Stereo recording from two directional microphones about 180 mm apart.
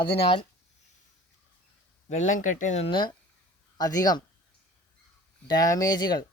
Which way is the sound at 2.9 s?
25° left (ahead or behind).